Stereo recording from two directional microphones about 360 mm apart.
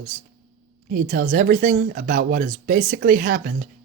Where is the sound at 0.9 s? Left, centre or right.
Right.